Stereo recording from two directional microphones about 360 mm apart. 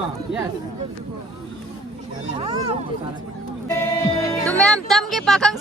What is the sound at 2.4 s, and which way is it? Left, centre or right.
Speech, centre.